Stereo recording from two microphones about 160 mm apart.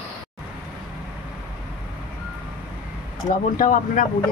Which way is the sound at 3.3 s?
55° left (ahead or behind).